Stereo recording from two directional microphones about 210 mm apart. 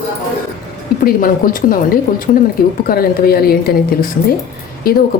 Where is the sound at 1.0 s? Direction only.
40° left (ahead or behind).